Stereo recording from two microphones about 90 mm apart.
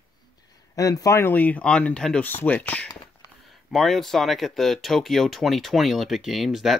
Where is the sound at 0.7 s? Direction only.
40° left (ahead or behind); by 2.9 s 15° left (ahead or behind).